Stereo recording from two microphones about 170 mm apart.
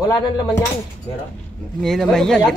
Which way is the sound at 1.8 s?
Centre (ahead or behind).